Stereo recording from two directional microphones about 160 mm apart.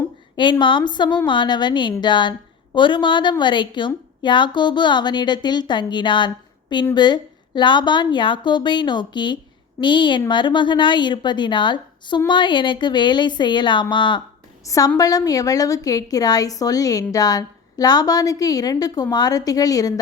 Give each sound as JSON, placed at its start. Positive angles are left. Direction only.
{"t": 0.6, "sound": "a woman's voice", "side_deg": 30}